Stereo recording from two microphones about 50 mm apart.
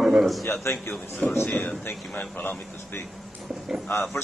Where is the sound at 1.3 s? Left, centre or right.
Left.